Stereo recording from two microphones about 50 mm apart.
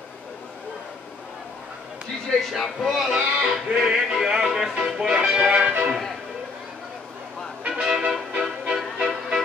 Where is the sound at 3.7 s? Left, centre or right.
Centre.